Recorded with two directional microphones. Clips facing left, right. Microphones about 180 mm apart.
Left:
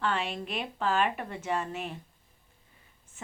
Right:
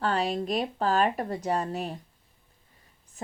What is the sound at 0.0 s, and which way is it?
Speech, 40° right (ahead or behind).